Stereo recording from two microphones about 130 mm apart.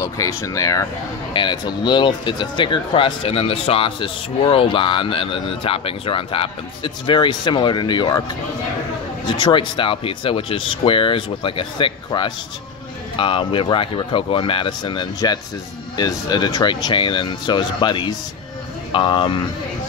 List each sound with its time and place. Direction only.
0.0 s speech: 25° left (ahead or behind)
1.3 s speech: 35° left (ahead or behind)
9.4 s speech: 40° left (ahead or behind)